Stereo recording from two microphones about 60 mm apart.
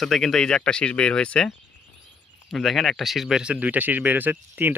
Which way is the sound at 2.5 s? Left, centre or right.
Centre.